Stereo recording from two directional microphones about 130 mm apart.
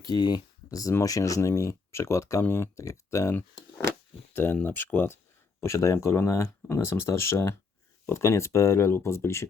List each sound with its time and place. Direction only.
0.0 s speech: 30° left (ahead or behind)
4.5 s speech: 15° left (ahead or behind)